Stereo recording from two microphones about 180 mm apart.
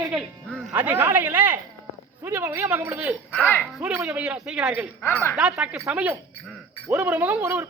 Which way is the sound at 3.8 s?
5° right (ahead or behind).